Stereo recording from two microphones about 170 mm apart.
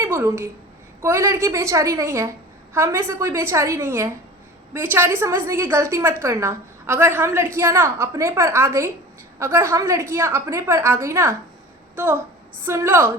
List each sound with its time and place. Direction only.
0.0 s a woman's voice: 15° right (ahead or behind)
12.6 s a woman's voice: 15° right (ahead or behind)